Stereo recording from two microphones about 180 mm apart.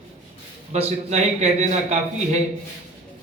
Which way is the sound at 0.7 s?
40° right (ahead or behind).